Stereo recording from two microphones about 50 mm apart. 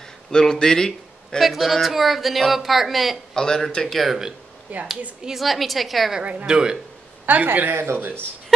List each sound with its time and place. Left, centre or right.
0.3 s a man's voice: centre
1.4 s speech: centre
3.3 s speech: centre
4.7 s speech: right
5.4 s speech: centre
6.4 s speech: centre
7.2 s speech: right
7.7 s speech: right